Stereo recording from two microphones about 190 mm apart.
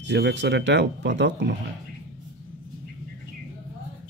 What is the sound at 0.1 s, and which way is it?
Speech, 70° right (ahead or behind).